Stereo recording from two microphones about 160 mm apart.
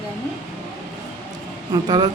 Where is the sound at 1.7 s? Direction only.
25° right (ahead or behind).